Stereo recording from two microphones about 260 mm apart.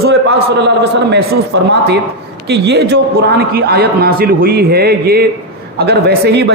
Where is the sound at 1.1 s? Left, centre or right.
Right.